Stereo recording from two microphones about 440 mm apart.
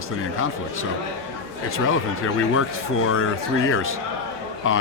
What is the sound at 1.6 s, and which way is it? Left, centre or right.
Speech, left.